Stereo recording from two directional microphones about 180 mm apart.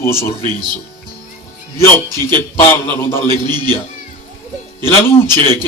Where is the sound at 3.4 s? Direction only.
25° right (ahead or behind).